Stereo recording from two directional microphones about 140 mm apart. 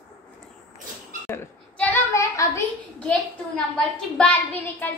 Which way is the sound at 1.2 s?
15° left (ahead or behind).